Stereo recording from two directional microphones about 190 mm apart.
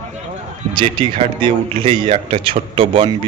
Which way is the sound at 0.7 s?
25° right (ahead or behind).